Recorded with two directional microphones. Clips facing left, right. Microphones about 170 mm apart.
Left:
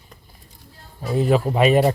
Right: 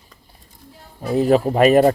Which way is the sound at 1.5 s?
45° right (ahead or behind).